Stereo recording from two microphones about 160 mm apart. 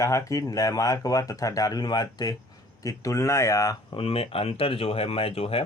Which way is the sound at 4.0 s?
35° left (ahead or behind).